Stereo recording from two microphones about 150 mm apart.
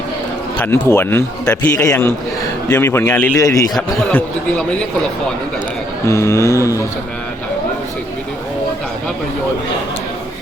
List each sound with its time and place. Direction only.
0.6 s a man's voice: 15° left (ahead or behind)
3.3 s mantra: 20° left (ahead or behind)
3.8 s a man's voice: 10° left (ahead or behind)
6.1 s mantra: 20° left (ahead or behind)